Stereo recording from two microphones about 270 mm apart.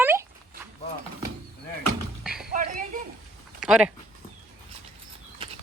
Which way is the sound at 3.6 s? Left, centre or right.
Centre.